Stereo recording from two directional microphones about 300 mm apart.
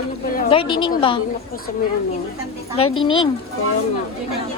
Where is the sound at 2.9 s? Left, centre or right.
Centre.